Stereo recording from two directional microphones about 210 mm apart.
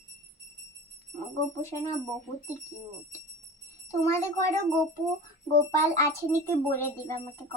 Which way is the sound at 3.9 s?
15° left (ahead or behind).